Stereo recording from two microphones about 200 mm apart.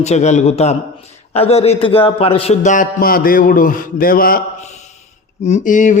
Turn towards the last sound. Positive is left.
turn(degrees=40)  # may be behind; listen again after turning